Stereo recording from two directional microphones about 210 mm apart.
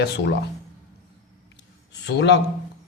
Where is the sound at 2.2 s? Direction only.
55° left (ahead or behind).